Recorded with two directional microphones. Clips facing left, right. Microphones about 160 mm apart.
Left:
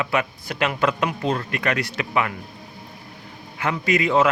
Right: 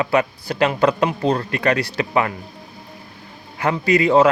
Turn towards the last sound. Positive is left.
turn(degrees=-35)  # may be behind; listen again after turning